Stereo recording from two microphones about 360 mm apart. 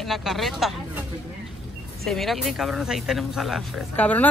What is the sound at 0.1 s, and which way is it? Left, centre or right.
Speech, centre.